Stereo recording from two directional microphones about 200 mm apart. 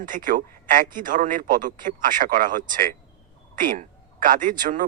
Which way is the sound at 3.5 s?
40° right (ahead or behind).